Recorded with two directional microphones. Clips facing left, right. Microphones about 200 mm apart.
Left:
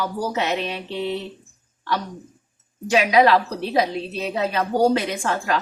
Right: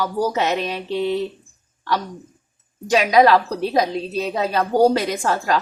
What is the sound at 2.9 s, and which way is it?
A woman's voice, 40° right (ahead or behind).